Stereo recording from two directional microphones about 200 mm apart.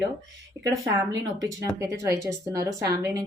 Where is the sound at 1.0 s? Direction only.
15° right (ahead or behind).